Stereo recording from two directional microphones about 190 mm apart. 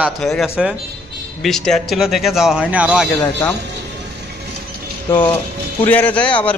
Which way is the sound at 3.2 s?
15° left (ahead or behind).